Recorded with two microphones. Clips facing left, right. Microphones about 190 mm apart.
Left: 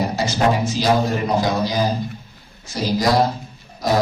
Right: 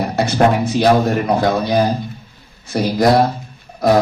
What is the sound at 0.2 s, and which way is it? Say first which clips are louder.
Speech: right 7 dB; 60° right (ahead or behind).